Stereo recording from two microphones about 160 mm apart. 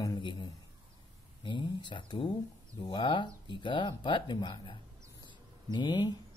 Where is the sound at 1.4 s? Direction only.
30° left (ahead or behind).